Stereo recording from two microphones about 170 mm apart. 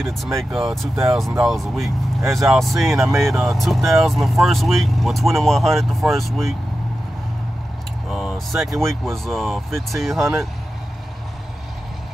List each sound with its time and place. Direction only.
0.4 s speech: centre (ahead or behind)
3.1 s speech: 15° right (ahead or behind)
3.3 s speech: centre (ahead or behind)
8.5 s speech: centre (ahead or behind)